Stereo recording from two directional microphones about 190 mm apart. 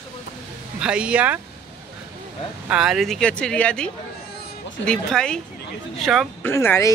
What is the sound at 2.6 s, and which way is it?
Speech, 5° right (ahead or behind).